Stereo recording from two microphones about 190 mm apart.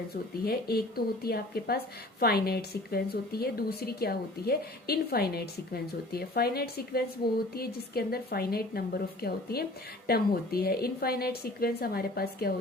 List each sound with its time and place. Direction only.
0.4 s a woman's voice: 55° left (ahead or behind)